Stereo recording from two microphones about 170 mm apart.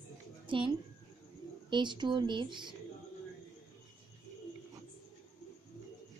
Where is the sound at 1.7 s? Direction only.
25° right (ahead or behind).